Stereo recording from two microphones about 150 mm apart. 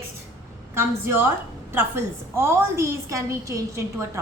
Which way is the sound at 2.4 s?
15° right (ahead or behind).